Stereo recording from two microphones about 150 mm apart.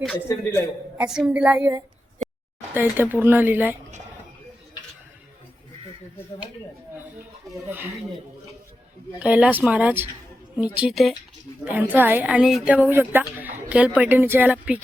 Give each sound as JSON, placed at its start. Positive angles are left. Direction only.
{"t": 0.9, "sound": "a woman's voice", "side_deg": -5}
{"t": 1.5, "sound": "a woman's voice", "side_deg": -20}
{"t": 2.2, "sound": "a sound", "side_deg": 0}
{"t": 2.7, "sound": "a woman's voice", "side_deg": -15}
{"t": 9.1, "sound": "a woman's voice", "side_deg": -10}